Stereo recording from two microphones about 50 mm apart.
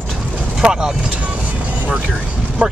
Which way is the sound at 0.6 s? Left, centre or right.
Centre.